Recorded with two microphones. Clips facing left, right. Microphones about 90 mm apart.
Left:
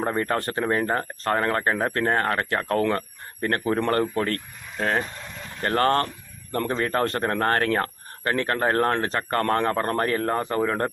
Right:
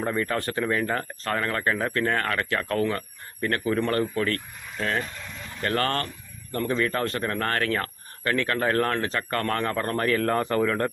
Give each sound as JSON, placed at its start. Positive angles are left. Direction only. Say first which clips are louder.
{"t": 0.0, "sound": "speech", "louder": "left 2 dB", "side_deg": 40}